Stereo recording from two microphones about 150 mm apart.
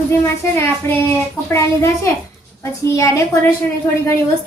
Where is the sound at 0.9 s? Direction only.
15° left (ahead or behind).